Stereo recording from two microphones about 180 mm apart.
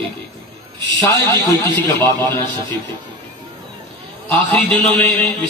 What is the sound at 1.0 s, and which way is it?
A man's voice, 10° left (ahead or behind).